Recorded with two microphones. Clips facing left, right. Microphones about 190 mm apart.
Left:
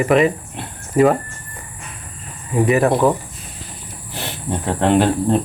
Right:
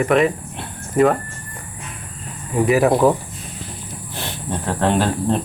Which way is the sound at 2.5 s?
Centre (ahead or behind).